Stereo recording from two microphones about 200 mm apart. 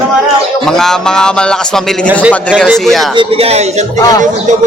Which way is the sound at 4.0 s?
20° left (ahead or behind).